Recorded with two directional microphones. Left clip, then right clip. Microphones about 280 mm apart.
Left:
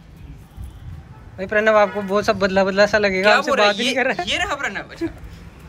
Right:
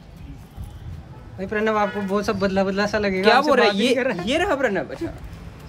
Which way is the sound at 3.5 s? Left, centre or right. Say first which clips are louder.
Even; right.